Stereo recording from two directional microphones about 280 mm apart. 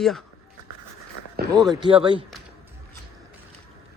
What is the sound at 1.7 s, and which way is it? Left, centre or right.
Speech, centre.